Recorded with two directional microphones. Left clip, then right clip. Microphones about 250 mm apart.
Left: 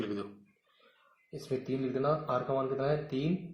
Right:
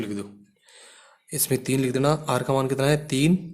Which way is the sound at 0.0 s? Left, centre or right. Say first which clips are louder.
Right 5 dB; centre.